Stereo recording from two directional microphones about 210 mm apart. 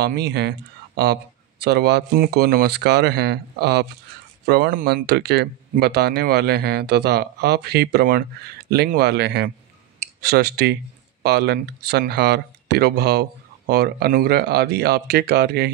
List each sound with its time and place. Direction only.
0.0 s speech: 50° right (ahead or behind)